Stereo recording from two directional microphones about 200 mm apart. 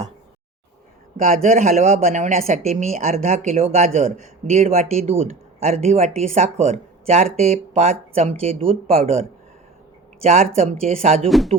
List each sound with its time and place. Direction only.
1.1 s a woman's voice: 40° right (ahead or behind)
10.2 s a woman's voice: 35° right (ahead or behind)
11.3 s speech: centre (ahead or behind)